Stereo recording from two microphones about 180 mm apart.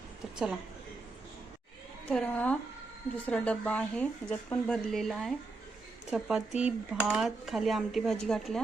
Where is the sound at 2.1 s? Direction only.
5° left (ahead or behind).